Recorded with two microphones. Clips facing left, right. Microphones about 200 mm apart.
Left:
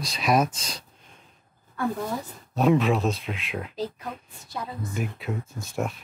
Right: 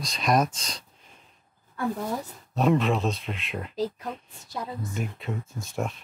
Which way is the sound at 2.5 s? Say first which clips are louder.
Left 2 dB; centre (ahead or behind).